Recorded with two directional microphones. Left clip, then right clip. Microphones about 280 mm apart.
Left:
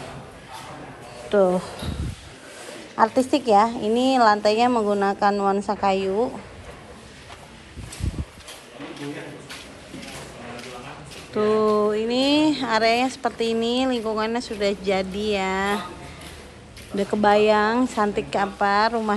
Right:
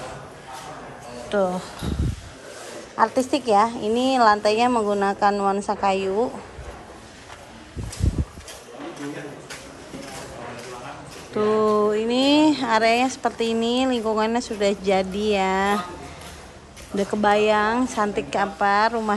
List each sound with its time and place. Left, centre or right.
1.3 s speech: centre
3.0 s speech: centre
11.3 s speech: centre
16.9 s speech: centre